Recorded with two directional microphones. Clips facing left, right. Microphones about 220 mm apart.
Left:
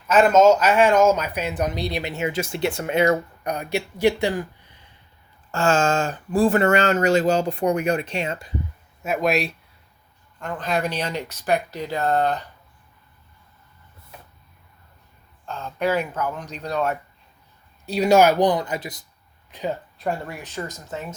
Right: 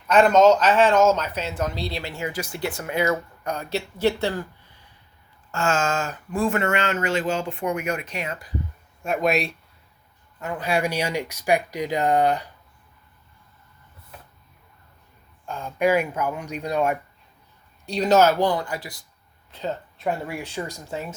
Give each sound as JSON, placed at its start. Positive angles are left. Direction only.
{"t": 0.1, "sound": "speech", "side_deg": 5}
{"t": 5.5, "sound": "speech", "side_deg": 35}
{"t": 9.0, "sound": "speech", "side_deg": 0}
{"t": 15.4, "sound": "speech", "side_deg": -10}
{"t": 17.8, "sound": "speech", "side_deg": 10}
{"t": 20.0, "sound": "speech", "side_deg": -5}